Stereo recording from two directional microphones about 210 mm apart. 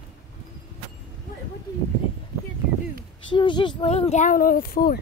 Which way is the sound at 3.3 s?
20° left (ahead or behind).